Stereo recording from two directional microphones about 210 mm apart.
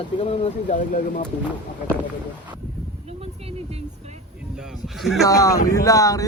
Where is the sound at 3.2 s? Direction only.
30° right (ahead or behind).